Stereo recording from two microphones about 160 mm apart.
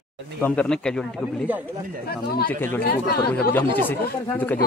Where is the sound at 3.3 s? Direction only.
10° left (ahead or behind).